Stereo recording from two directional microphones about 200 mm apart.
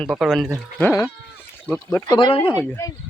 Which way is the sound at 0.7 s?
10° left (ahead or behind).